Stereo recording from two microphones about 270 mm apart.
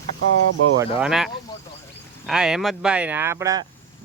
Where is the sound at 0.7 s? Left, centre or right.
Centre.